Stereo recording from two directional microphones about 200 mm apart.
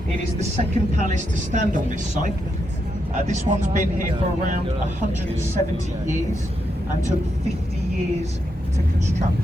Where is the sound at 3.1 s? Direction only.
35° right (ahead or behind).